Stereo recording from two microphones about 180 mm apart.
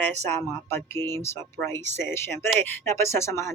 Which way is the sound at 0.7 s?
15° left (ahead or behind).